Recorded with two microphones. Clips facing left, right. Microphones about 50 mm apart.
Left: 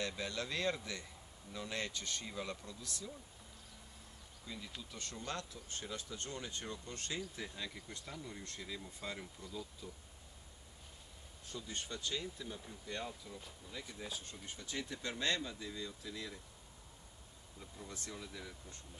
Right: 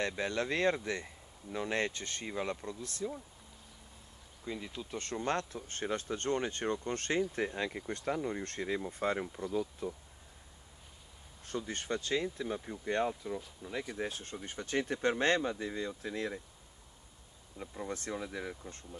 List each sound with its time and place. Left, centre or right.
0.0 s speech: right
4.5 s speech: right
4.9 s speech: right
11.4 s speech: right
13.6 s speech: right
13.9 s speech: right
17.6 s speech: right